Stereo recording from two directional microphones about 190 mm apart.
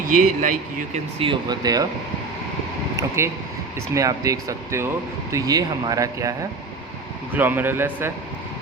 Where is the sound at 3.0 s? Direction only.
15° right (ahead or behind).